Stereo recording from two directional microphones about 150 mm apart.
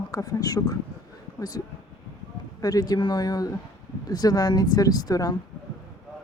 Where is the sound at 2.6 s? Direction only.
25° left (ahead or behind).